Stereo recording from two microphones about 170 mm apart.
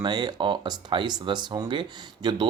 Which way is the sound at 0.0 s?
25° right (ahead or behind).